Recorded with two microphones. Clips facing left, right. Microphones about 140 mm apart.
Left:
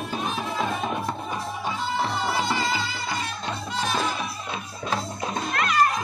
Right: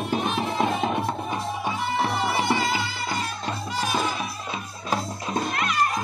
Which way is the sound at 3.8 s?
10° right (ahead or behind).